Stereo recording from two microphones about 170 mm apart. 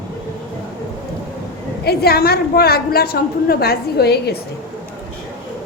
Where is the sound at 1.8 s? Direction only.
65° left (ahead or behind).